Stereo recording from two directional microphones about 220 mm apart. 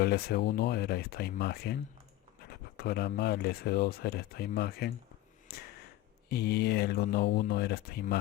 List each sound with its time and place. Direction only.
0.0 s speech: 45° left (ahead or behind)